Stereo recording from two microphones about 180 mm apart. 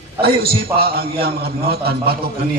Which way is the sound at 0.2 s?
55° right (ahead or behind).